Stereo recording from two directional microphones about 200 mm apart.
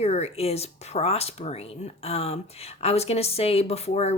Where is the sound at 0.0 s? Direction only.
30° left (ahead or behind).